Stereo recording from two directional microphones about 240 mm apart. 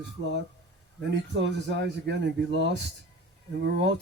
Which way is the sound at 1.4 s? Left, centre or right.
Right.